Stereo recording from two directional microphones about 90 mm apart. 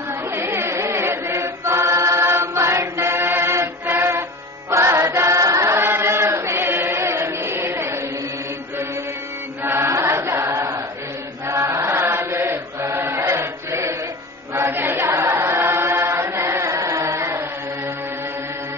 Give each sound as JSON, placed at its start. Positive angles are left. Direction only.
{"t": 0.3, "sound": "chant", "side_deg": -25}
{"t": 9.6, "sound": "choir", "side_deg": -30}
{"t": 11.4, "sound": "chant", "side_deg": -35}
{"t": 14.5, "sound": "choir", "side_deg": -25}